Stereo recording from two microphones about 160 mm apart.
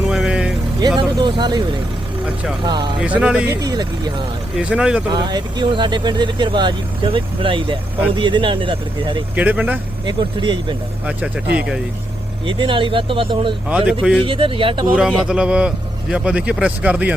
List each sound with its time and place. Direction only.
0.1 s vehicle: 5° right (ahead or behind)
0.8 s vehicle: 25° right (ahead or behind)
2.6 s speech: 30° right (ahead or behind)
3.0 s a man's voice: 5° right (ahead or behind)
3.6 s speech: 25° right (ahead or behind)
4.5 s speech: 5° right (ahead or behind)
5.1 s speech: 25° right (ahead or behind)
9.3 s a man's voice: 10° right (ahead or behind)
10.1 s speech: 30° right (ahead or behind)
12.5 s speech: 30° right (ahead or behind)
13.7 s a man's voice: 10° right (ahead or behind)
14.3 s speech: 35° right (ahead or behind)
14.9 s a man's voice: 5° right (ahead or behind)